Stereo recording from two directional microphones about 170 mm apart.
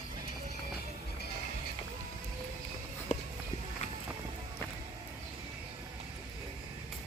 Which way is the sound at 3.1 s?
45° left (ahead or behind).